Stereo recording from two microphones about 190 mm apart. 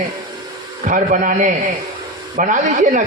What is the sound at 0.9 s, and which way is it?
A man's voice, 40° right (ahead or behind).